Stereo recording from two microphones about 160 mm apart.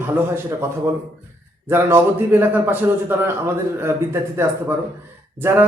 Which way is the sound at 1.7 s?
15° right (ahead or behind).